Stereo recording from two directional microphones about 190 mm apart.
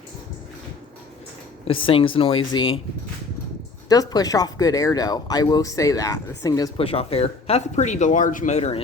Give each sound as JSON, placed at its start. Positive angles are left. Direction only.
{"t": 1.6, "sound": "speech", "side_deg": 30}
{"t": 3.8, "sound": "speech", "side_deg": 20}
{"t": 6.7, "sound": "speech", "side_deg": 30}